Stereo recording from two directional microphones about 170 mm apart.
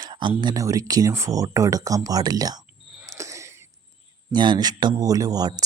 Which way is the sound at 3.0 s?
20° right (ahead or behind).